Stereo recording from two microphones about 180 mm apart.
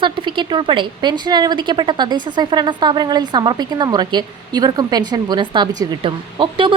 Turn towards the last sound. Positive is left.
turn(degrees=-30)  # may be behind; listen again after turning